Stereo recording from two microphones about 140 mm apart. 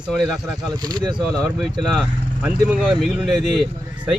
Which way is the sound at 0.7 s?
30° right (ahead or behind).